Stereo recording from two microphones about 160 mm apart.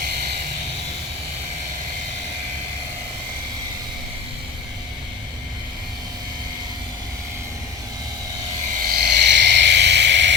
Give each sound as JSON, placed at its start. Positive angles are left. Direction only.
{"t": 8.7, "sound": "frog", "side_deg": -65}